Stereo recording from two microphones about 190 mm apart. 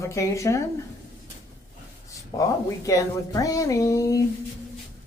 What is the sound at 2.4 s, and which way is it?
A woman's voice, 15° left (ahead or behind).